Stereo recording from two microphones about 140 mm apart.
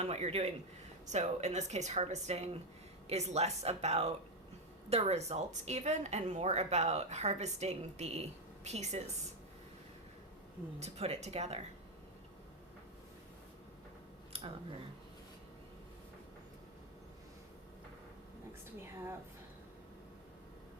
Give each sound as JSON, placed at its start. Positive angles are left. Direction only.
{"t": 0.0, "sound": "speech", "side_deg": -50}
{"t": 10.8, "sound": "speech", "side_deg": -50}
{"t": 14.3, "sound": "a sound", "side_deg": -45}